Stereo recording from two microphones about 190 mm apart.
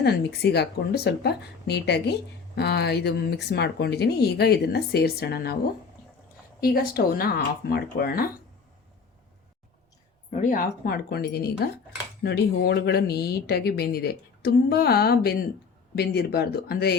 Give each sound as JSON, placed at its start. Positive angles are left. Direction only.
{"t": 0.0, "sound": "speech", "side_deg": 60}
{"t": 6.6, "sound": "speech", "side_deg": 50}
{"t": 10.3, "sound": "speech", "side_deg": 45}